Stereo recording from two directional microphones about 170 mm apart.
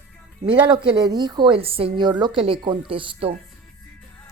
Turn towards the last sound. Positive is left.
turn(degrees=-30)  # may be behind; listen again after turning